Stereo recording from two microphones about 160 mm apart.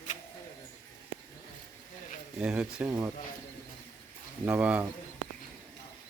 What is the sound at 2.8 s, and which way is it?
Speech, 20° right (ahead or behind).